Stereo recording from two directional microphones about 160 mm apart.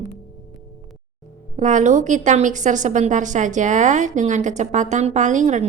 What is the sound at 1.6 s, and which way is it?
A woman's voice, 50° right (ahead or behind).